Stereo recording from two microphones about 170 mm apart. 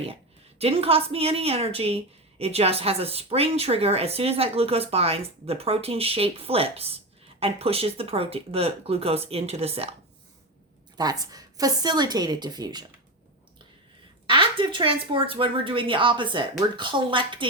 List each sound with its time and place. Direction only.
0.6 s speech: 35° right (ahead or behind)
10.9 s a woman's voice: 20° right (ahead or behind)
14.3 s a woman's voice: 30° right (ahead or behind)